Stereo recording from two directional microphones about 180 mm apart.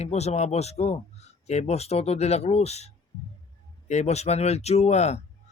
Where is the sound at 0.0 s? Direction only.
35° left (ahead or behind).